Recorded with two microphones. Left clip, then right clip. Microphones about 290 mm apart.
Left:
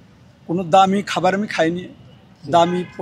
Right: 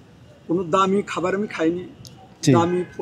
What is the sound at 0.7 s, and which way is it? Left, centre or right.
Speech, left.